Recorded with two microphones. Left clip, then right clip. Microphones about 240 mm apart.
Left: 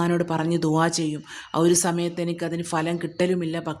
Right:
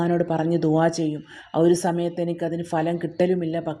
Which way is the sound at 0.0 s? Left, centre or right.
Centre.